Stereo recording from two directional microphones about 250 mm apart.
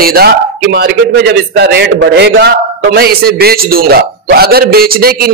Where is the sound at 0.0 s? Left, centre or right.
Right.